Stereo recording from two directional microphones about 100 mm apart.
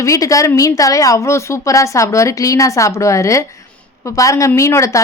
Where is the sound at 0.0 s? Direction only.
35° left (ahead or behind).